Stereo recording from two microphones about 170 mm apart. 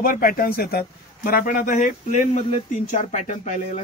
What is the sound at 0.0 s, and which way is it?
A man's voice, 60° left (ahead or behind).